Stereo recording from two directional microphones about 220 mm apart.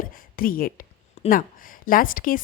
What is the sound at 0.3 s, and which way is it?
A woman's voice, 40° left (ahead or behind).